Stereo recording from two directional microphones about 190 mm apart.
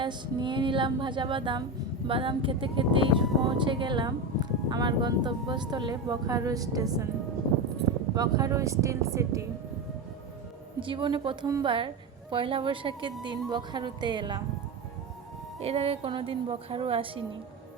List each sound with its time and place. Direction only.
0.0 s speech: 25° right (ahead or behind)
8.1 s speech: 20° right (ahead or behind)
10.8 s speech: 25° right (ahead or behind)
15.6 s speech: 30° right (ahead or behind)